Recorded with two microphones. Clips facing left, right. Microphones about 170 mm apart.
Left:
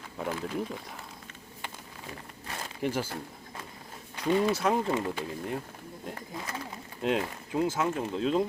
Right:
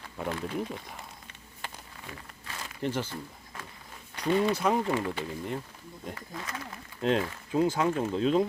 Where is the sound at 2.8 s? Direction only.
10° left (ahead or behind).